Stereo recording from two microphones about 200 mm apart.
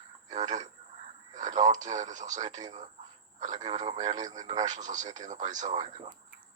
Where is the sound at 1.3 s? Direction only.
35° right (ahead or behind).